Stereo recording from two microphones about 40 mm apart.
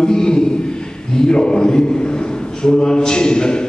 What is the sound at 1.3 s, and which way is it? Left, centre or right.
A man's voice, centre.